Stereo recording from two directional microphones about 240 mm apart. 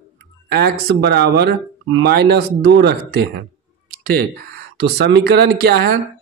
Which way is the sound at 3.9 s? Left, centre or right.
Right.